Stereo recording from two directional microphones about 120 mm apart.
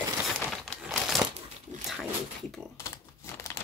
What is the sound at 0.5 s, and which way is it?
Crumpling, centre (ahead or behind).